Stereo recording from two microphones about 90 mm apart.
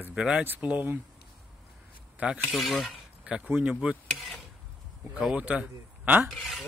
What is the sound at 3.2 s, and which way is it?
Speech, 15° right (ahead or behind).